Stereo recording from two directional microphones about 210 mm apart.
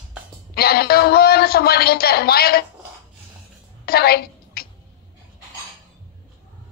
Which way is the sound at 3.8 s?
45° left (ahead or behind).